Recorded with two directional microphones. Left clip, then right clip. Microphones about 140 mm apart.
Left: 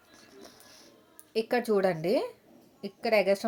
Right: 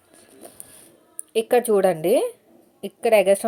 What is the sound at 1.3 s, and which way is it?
Speech, 25° right (ahead or behind).